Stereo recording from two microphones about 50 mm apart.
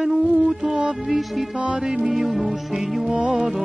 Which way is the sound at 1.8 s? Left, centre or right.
Centre.